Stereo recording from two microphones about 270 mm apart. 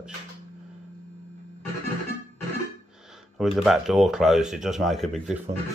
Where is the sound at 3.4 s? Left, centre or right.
Centre.